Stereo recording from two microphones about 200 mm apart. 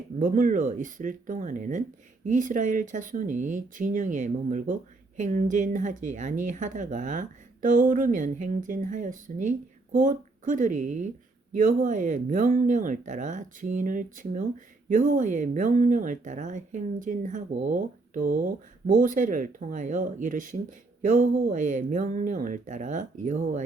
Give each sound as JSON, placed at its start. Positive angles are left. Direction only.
{"t": 0.2, "sound": "speech", "side_deg": -40}